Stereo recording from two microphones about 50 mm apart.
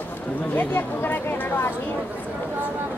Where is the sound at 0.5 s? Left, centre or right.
Left.